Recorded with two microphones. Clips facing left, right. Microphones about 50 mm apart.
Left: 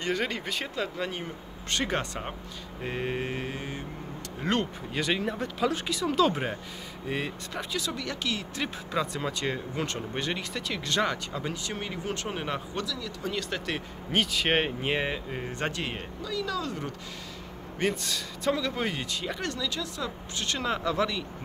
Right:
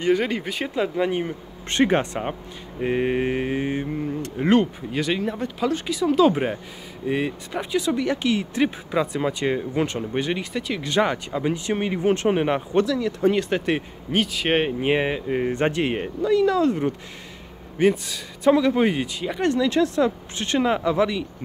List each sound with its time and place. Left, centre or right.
0.0 s speech: centre; by 4.5 s right
4.5 s speech: centre; by 13.8 s right
14.1 s speech: centre
14.8 s speech: centre
15.3 s speech: right
17.7 s a man's voice: centre
18.5 s speech: right
19.4 s speech: right
19.7 s speech: right; by 21.3 s centre